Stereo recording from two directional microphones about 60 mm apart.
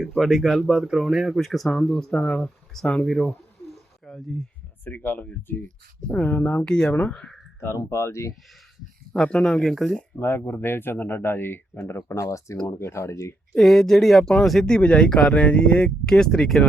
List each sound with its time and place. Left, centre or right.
0.0 s speech: centre
1.4 s speech: centre
4.9 s speech: left
6.6 s speech: centre
7.8 s speech: left
9.1 s speech: centre
9.4 s speech: centre
10.2 s speech: left
12.1 s speech: left
13.5 s speech: centre
14.7 s speech: centre